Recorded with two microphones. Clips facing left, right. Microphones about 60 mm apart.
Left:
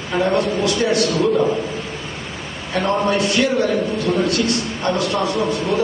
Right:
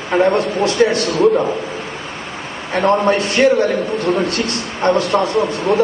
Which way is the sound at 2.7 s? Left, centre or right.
Right.